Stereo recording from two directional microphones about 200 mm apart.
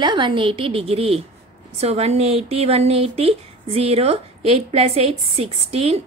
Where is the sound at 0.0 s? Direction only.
25° right (ahead or behind).